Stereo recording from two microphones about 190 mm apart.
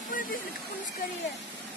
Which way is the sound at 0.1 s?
45° left (ahead or behind).